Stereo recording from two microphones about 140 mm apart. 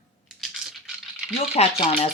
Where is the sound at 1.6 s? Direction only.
50° left (ahead or behind).